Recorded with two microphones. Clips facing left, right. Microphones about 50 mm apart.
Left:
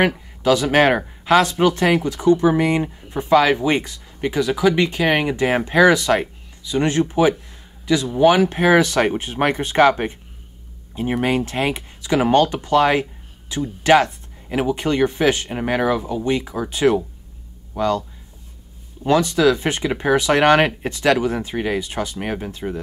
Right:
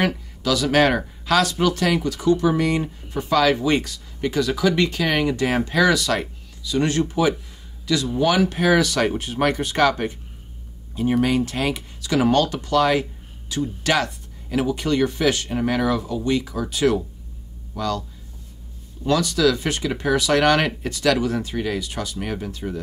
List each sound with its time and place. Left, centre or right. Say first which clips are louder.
0.0 s speech: left 5 dB; left
19.0 s speech: left 3 dB; left